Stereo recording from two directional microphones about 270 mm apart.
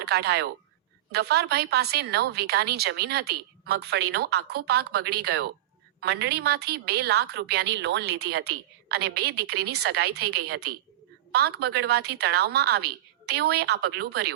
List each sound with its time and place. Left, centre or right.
0.0 s a woman's voice: right